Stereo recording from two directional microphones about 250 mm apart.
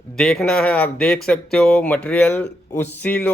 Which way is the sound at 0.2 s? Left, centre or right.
Centre.